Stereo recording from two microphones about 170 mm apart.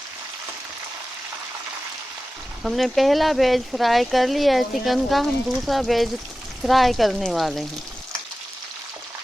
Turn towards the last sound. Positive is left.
turn(degrees=0)  # may be behind; listen again after turning